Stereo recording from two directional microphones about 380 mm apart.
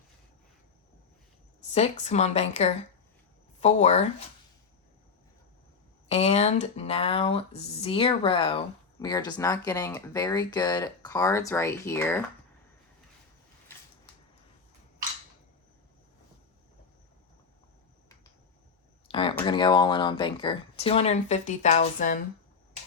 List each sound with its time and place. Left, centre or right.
1.7 s speech: centre
6.1 s speech: centre
19.1 s speech: centre